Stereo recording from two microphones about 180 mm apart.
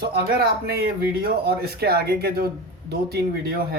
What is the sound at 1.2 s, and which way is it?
Speech, 60° right (ahead or behind).